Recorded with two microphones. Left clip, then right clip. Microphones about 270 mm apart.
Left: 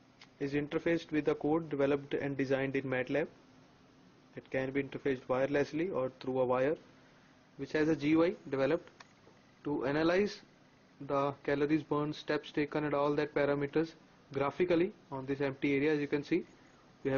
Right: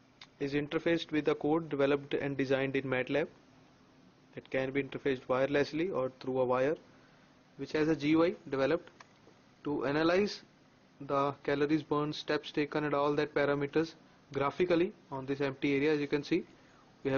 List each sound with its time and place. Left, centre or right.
0.4 s speech: centre
4.4 s speech: centre
6.2 s speech: right
6.5 s speech: centre